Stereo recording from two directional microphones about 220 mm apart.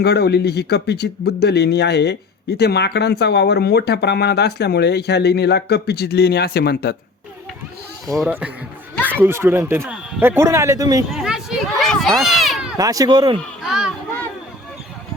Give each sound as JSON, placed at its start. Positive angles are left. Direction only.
{"t": 0.0, "sound": "speech", "side_deg": 45}
{"t": 8.2, "sound": "speech", "side_deg": -5}
{"t": 11.1, "sound": "a sound", "side_deg": 0}
{"t": 12.7, "sound": "speech", "side_deg": -15}
{"t": 13.6, "sound": "speech", "side_deg": 0}